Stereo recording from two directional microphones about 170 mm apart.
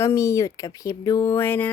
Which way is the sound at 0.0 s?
15° left (ahead or behind).